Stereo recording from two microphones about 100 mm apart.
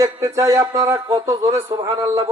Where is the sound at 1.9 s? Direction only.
30° right (ahead or behind).